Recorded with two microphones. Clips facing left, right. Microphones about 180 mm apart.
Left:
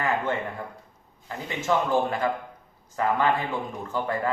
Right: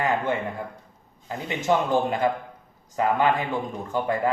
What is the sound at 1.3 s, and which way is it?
Speech, 20° right (ahead or behind).